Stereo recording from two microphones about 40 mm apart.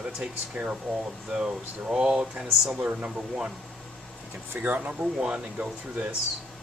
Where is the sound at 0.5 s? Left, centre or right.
Right.